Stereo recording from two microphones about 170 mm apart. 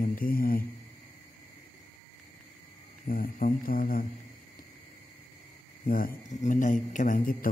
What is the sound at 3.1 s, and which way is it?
Speech, 55° left (ahead or behind).